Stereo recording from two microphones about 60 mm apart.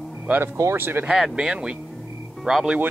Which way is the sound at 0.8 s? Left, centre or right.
Right.